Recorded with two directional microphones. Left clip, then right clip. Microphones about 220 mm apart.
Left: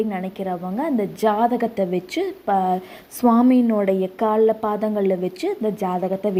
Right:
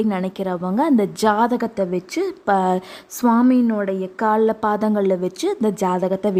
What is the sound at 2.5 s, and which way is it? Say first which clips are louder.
Speech: right 2 dB; 20° right (ahead or behind).